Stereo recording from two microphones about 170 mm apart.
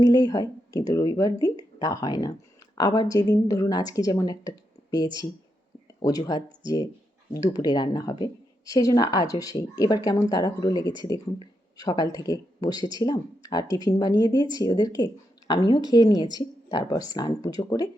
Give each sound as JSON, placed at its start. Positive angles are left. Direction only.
{"t": 0.0, "sound": "speech", "side_deg": 25}